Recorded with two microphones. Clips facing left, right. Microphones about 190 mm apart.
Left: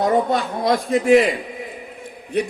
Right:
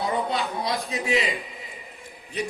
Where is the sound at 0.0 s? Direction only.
45° left (ahead or behind).